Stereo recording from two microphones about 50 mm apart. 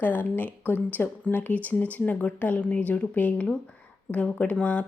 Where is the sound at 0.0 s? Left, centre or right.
Left.